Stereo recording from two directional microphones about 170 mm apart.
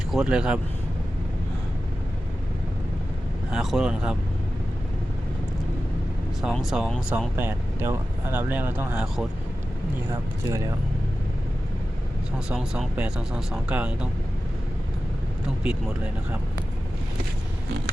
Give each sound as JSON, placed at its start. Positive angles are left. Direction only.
{"t": 0.1, "sound": "speech", "side_deg": -5}
{"t": 3.5, "sound": "speech", "side_deg": 0}
{"t": 6.4, "sound": "speech", "side_deg": 0}
{"t": 7.3, "sound": "speech", "side_deg": -15}
{"t": 12.5, "sound": "speech", "side_deg": -5}